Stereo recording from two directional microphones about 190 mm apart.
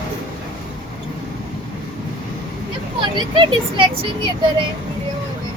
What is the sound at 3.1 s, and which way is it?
Speech, 25° right (ahead or behind).